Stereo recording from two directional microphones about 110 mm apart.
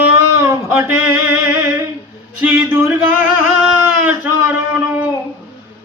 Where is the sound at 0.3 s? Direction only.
20° right (ahead or behind).